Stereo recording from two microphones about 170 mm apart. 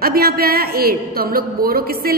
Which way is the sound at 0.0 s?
65° right (ahead or behind).